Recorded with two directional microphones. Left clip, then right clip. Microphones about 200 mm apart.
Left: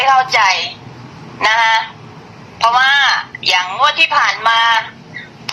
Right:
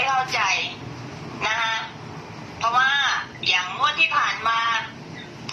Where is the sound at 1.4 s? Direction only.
45° left (ahead or behind).